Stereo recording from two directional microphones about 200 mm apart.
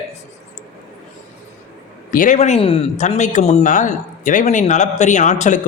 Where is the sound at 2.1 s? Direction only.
40° left (ahead or behind).